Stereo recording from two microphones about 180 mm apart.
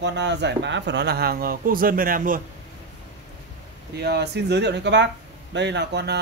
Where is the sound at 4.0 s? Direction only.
70° right (ahead or behind).